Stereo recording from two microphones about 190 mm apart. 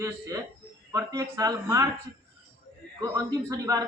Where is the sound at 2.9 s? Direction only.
20° right (ahead or behind).